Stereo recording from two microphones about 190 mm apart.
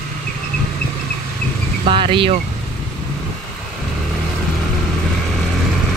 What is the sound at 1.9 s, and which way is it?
Speech, 25° right (ahead or behind).